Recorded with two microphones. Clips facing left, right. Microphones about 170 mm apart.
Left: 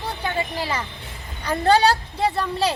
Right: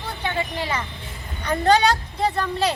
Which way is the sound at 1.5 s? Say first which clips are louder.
Left 1 dB; 35° left (ahead or behind).